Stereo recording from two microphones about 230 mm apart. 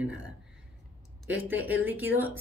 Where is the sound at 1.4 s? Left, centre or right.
Centre.